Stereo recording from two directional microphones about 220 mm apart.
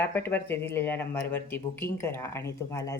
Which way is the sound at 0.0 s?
10° left (ahead or behind).